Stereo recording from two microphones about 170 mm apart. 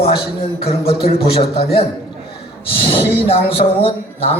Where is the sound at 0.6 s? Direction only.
35° left (ahead or behind).